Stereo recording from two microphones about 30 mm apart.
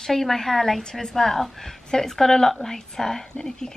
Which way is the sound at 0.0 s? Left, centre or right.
Centre.